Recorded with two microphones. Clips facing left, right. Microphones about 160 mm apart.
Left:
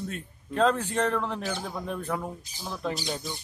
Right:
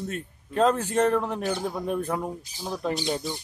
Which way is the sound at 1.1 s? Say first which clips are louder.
Right 4 dB; 10° right (ahead or behind).